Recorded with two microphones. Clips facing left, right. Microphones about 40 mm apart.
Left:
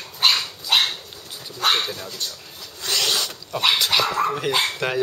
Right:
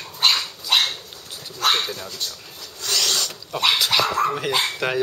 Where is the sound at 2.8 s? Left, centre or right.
Centre.